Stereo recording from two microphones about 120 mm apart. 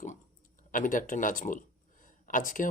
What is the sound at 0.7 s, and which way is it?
Speech, 90° left.